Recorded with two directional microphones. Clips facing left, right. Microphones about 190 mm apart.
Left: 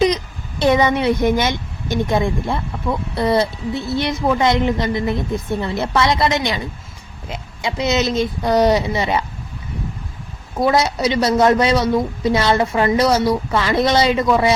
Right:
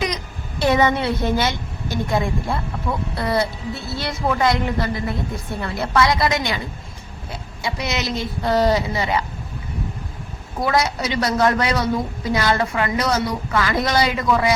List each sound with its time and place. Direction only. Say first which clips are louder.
0.6 s a woman's voice: left 3 dB; 20° left (ahead or behind)
10.6 s a woman's voice: left 4 dB; 25° left (ahead or behind)